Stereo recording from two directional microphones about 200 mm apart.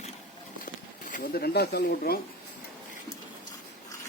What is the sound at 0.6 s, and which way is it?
Speech, 40° left (ahead or behind).